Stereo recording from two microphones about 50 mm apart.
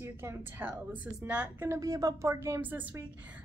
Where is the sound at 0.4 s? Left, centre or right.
Right.